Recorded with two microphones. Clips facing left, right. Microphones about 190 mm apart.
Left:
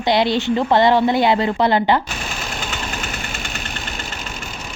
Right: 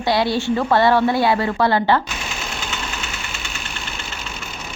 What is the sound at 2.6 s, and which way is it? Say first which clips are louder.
Engine: left 2 dB; 45° left (ahead or behind).